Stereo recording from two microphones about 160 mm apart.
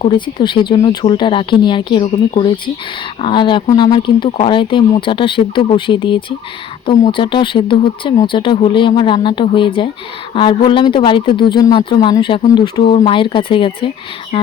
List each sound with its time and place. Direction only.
0.0 s speech: 30° left (ahead or behind)